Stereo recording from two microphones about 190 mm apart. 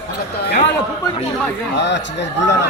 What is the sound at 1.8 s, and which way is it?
Speech, 65° left (ahead or behind).